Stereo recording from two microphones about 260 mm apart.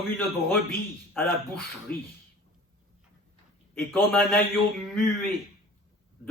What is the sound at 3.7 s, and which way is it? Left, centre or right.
A man's voice, centre.